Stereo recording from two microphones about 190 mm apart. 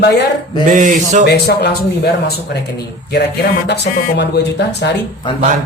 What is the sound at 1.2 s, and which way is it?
Speech, 60° left (ahead or behind).